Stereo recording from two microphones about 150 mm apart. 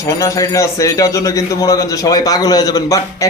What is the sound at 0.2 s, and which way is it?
A man's voice, 20° left (ahead or behind).